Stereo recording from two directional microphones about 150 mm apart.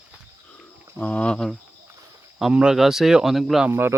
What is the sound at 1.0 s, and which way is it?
Speech, 10° left (ahead or behind).